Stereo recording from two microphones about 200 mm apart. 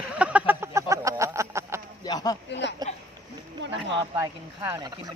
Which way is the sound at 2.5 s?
60° left (ahead or behind).